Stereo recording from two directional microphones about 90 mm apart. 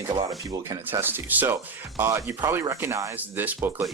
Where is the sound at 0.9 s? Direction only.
25° right (ahead or behind).